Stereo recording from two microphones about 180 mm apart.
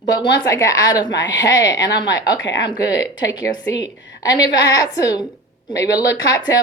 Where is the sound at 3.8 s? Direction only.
90° left.